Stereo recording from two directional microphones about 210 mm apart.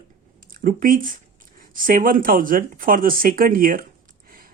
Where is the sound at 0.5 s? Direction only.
40° right (ahead or behind).